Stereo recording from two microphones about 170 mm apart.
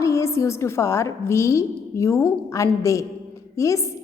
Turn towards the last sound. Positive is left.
turn(degrees=20)  # may be behind; listen again after turning